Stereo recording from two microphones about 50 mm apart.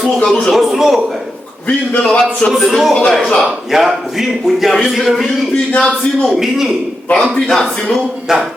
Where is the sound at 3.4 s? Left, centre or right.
Centre.